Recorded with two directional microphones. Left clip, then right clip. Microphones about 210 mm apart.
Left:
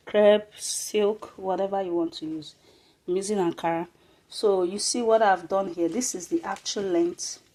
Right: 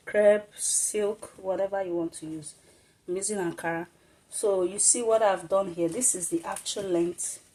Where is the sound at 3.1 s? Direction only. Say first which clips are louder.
Left 5 dB; 35° left (ahead or behind).